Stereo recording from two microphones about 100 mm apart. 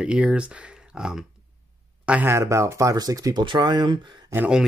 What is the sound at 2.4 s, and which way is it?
Speech, 30° right (ahead or behind).